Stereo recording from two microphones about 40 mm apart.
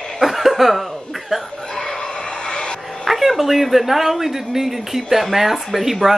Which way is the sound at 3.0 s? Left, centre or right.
Centre.